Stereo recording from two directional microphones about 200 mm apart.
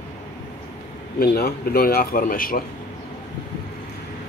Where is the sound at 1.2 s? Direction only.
50° left (ahead or behind).